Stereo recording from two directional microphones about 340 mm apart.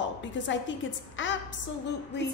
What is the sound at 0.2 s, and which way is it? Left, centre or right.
A woman's voice, left.